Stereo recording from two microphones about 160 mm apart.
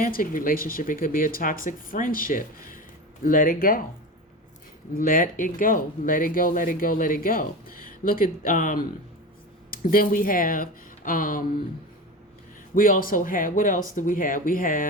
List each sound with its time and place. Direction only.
0.0 s speech: 60° left (ahead or behind)
4.9 s speech: 60° left (ahead or behind)
12.7 s speech: 60° left (ahead or behind)